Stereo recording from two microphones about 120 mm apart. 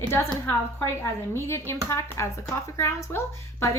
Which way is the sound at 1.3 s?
20° left (ahead or behind).